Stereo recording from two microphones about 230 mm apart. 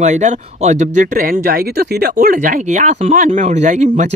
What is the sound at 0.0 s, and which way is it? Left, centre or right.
Speech, right.